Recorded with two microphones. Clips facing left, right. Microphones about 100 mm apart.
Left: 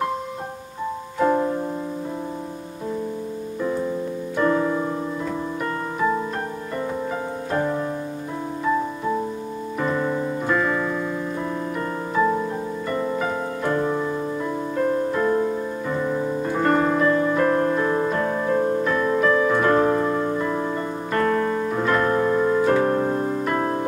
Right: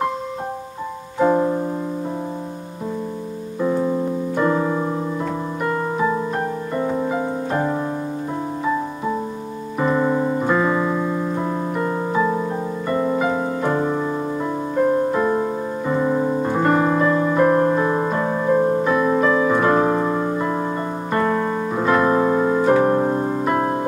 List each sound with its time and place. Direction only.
1.2 s music: 20° right (ahead or behind)
4.4 s keyboard: 20° right (ahead or behind)
7.1 s music: 25° right (ahead or behind)
9.8 s piano: 20° right (ahead or behind)
10.5 s piano: 15° right (ahead or behind)
13.2 s music: 10° right (ahead or behind)
15.1 s music: 15° right (ahead or behind)
16.4 s music: 15° right (ahead or behind)
18.9 s piano: 15° right (ahead or behind)
21.1 s keyboard: 15° right (ahead or behind)